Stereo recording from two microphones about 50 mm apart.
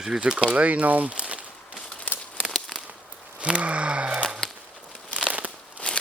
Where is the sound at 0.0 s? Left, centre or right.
Centre.